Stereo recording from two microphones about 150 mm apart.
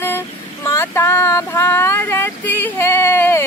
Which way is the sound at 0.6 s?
20° left (ahead or behind).